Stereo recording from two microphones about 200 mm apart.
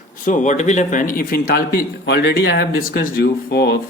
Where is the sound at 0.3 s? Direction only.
40° left (ahead or behind).